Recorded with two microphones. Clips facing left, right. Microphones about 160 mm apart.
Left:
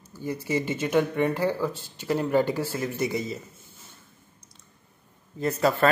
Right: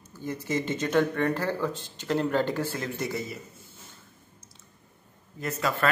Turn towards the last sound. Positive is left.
turn(degrees=35)  # may be behind; listen again after turning